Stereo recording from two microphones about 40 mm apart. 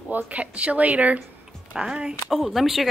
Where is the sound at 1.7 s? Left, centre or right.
Centre.